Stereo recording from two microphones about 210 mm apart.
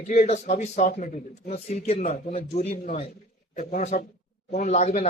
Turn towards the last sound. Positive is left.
turn(degrees=30)  # may be behind; listen again after turning